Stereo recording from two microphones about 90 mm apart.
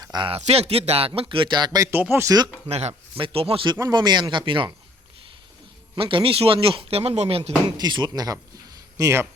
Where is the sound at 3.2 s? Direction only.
80° right.